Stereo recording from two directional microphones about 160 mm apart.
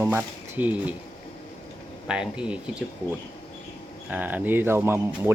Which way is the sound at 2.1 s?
5° right (ahead or behind).